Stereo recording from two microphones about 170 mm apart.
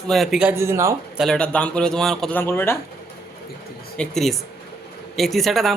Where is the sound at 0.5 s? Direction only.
15° right (ahead or behind).